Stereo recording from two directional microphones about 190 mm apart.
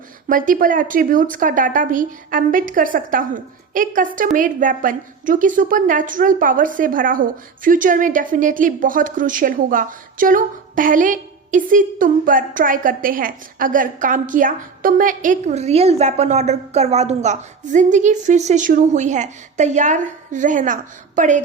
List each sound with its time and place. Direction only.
0.3 s a woman's voice: 45° right (ahead or behind)